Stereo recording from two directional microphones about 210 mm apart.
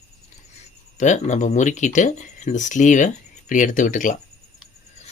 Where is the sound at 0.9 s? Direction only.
35° left (ahead or behind).